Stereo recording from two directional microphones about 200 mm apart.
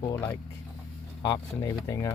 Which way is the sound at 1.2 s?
15° left (ahead or behind).